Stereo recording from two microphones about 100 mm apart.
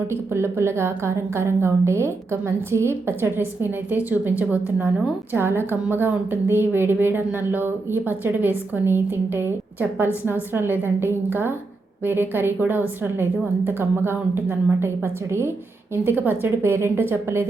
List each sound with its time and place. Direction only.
0.1 s a woman's voice: 25° right (ahead or behind)
10.5 s a woman's voice: 20° right (ahead or behind)